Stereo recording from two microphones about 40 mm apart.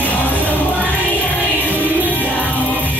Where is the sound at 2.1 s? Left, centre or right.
Left.